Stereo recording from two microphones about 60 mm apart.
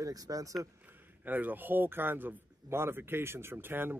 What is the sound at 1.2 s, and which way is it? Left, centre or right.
A man's voice, right.